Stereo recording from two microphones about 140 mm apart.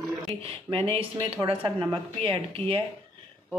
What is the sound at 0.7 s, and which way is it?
Speech, 40° right (ahead or behind).